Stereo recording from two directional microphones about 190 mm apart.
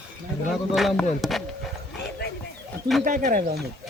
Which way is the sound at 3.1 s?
45° right (ahead or behind).